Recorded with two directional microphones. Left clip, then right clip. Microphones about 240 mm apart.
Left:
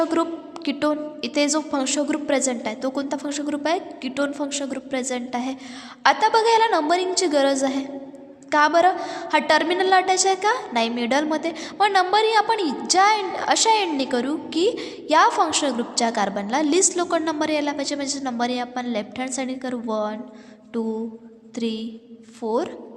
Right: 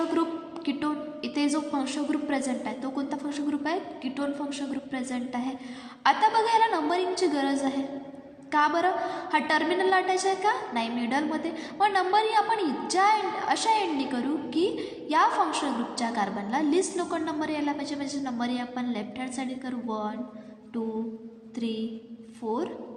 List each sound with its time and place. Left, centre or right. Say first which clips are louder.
0.1 s a woman's voice: left 5 dB; left
21.5 s a woman's voice: left 5 dB; left